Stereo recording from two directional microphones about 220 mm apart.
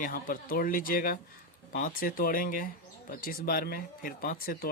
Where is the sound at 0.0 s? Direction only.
40° left (ahead or behind).